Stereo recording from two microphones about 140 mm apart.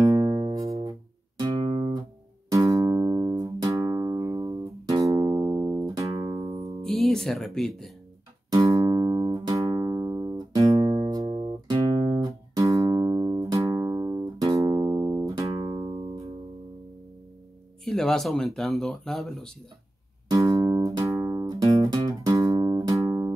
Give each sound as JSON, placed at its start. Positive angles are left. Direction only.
{"t": 0.0, "sound": "music", "side_deg": -25}
{"t": 1.6, "sound": "guitar", "side_deg": -35}
{"t": 2.5, "sound": "music", "side_deg": -25}
{"t": 6.8, "sound": "speech", "side_deg": 5}
{"t": 8.5, "sound": "music", "side_deg": -25}
{"t": 12.3, "sound": "music", "side_deg": -20}
{"t": 17.8, "sound": "speech", "side_deg": 5}
{"t": 20.2, "sound": "music", "side_deg": -25}